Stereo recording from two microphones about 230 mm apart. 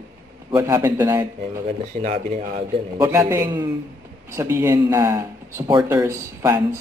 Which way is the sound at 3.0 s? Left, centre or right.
Centre.